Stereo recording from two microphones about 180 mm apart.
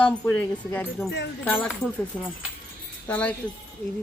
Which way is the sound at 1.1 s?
75° left (ahead or behind).